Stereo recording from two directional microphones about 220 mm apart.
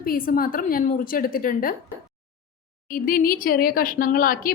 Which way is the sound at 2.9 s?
40° left (ahead or behind).